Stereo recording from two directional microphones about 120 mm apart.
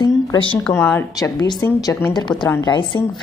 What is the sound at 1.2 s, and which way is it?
Speech, 30° left (ahead or behind).